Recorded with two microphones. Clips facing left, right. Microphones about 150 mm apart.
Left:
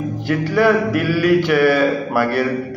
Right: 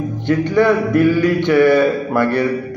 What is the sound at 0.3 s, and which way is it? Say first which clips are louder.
A man's voice: right 2 dB; 10° left (ahead or behind).